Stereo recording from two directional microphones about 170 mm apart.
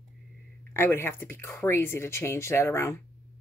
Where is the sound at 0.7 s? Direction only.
15° left (ahead or behind).